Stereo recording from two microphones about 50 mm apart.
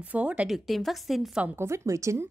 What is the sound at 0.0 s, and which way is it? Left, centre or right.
Speech, right.